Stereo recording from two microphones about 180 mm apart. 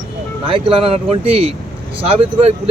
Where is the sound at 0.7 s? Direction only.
30° right (ahead or behind).